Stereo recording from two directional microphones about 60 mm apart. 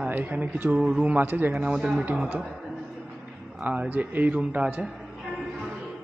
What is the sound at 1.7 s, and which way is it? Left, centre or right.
Speech, centre.